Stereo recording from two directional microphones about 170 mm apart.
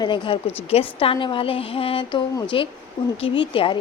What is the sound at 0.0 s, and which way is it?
A woman's voice, 30° left (ahead or behind).